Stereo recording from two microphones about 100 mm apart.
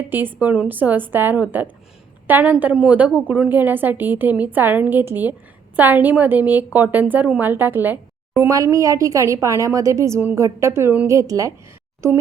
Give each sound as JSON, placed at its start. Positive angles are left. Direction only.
{"t": 0.1, "sound": "a woman's voice", "side_deg": -20}